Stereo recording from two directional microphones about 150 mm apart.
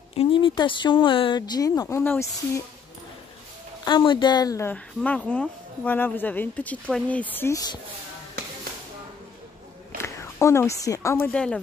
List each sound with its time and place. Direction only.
0.1 s speech: 40° left (ahead or behind); by 2.6 s 20° left (ahead or behind)
3.8 s speech: 35° left (ahead or behind)
4.6 s speech: 10° left (ahead or behind)
10.0 s speech: 15° left (ahead or behind)